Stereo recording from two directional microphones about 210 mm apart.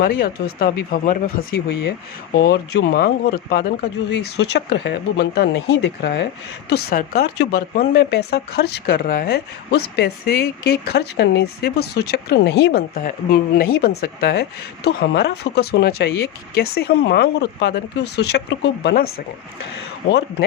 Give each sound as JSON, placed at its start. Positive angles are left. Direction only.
{"t": 0.0, "sound": "speech", "side_deg": 45}